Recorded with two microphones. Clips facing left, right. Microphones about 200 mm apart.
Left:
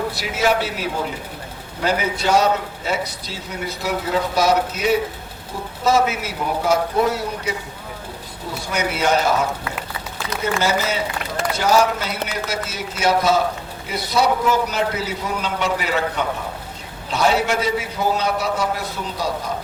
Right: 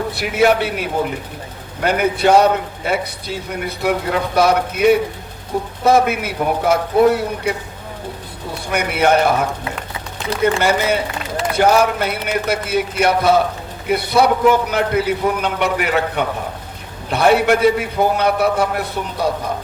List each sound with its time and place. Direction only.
0.1 s a man's voice: 60° right (ahead or behind)
8.7 s a man's voice: 60° right (ahead or behind)